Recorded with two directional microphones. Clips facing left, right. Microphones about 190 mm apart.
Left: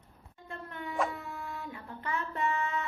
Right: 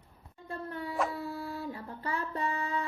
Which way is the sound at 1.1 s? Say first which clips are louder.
Right 4 dB; 35° right (ahead or behind).